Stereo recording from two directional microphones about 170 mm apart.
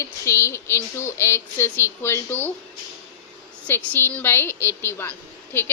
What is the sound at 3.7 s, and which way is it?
A woman's voice, 15° left (ahead or behind).